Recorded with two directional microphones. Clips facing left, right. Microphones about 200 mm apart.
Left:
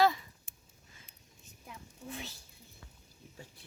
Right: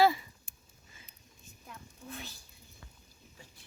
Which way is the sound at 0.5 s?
25° left (ahead or behind).